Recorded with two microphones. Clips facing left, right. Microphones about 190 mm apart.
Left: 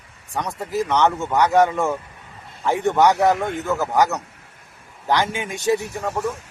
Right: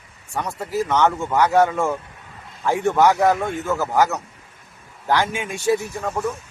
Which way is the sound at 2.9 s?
15° left (ahead or behind).